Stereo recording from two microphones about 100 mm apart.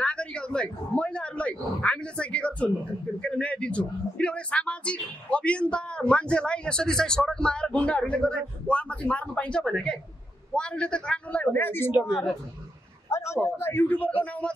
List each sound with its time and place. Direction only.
0.0 s a man's voice: 10° left (ahead or behind)
12.1 s a woman's voice: centre (ahead or behind)
13.1 s a man's voice: 30° left (ahead or behind)